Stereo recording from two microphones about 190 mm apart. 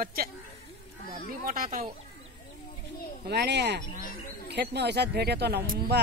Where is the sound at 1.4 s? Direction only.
45° right (ahead or behind).